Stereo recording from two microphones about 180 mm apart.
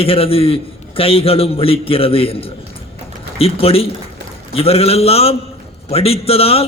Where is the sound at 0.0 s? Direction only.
30° left (ahead or behind).